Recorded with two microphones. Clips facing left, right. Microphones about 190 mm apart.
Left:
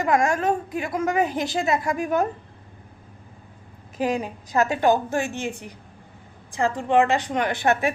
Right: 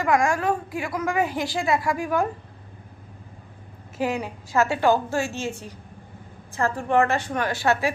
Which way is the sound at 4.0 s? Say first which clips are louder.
Left 2 dB; 20° left (ahead or behind).